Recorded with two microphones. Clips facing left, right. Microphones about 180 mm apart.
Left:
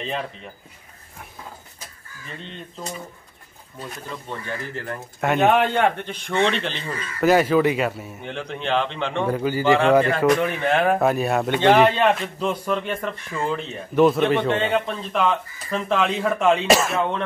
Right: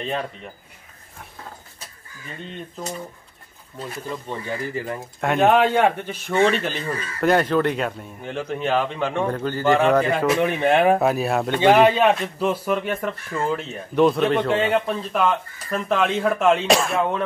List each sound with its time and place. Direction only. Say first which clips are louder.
3.8 s a man's voice: right 4 dB; 5° right (ahead or behind)
5.2 s a man's voice: right 1 dB; centre (ahead or behind)
7.2 s a man's voice: left 2 dB; 5° left (ahead or behind)
10.0 s a man's voice: left 1 dB; 5° right (ahead or behind)
10.4 s speech: right 3 dB; 15° right (ahead or behind)
10.9 s a man's voice: right 1 dB; centre (ahead or behind)